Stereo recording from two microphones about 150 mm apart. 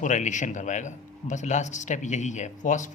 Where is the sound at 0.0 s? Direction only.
55° left (ahead or behind).